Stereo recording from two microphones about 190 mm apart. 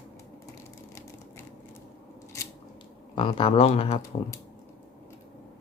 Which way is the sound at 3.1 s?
25° left (ahead or behind).